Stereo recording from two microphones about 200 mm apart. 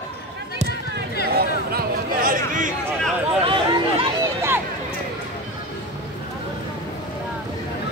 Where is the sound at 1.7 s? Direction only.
45° right (ahead or behind).